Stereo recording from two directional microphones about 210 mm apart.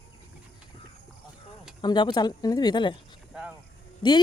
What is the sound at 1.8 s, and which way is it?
Speech, 20° left (ahead or behind).